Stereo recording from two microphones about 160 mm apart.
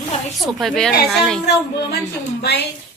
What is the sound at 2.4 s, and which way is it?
Speech, 90° left.